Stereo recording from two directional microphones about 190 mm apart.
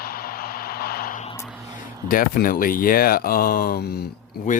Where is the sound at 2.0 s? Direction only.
50° left (ahead or behind).